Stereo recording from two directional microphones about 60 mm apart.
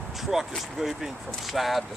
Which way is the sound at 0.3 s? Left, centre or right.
Centre.